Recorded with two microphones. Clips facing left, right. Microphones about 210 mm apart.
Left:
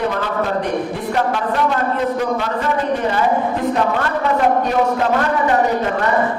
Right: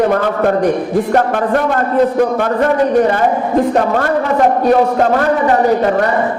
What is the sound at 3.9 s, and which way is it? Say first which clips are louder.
A man's voice: right 5 dB; 45° right (ahead or behind).